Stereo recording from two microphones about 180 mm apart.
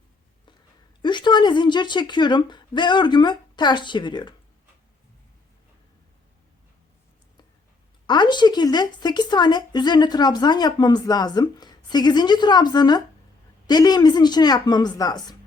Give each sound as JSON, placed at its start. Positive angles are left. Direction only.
{"t": 1.0, "sound": "speech", "side_deg": 25}
{"t": 8.0, "sound": "speech", "side_deg": 25}